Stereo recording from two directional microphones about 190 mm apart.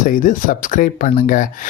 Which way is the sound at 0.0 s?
45° left (ahead or behind).